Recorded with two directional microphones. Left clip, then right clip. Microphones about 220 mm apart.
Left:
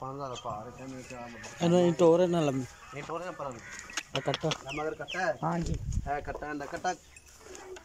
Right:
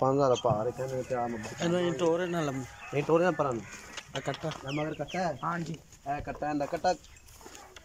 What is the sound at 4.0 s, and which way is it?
Duck, 55° left (ahead or behind).